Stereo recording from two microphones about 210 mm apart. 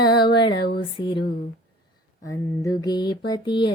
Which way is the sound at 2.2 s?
15° left (ahead or behind).